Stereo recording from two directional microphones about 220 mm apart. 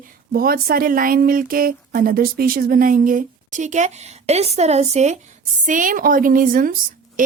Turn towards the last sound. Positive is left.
turn(degrees=-40)  # may be behind; listen again after turning